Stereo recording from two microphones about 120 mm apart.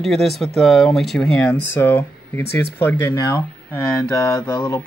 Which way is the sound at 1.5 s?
20° left (ahead or behind).